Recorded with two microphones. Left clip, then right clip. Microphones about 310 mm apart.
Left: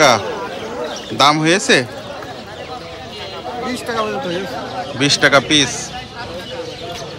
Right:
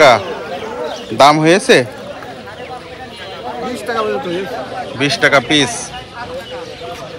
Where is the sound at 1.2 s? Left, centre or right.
Centre.